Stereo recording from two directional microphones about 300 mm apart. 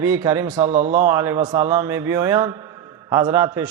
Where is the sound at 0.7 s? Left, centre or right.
Right.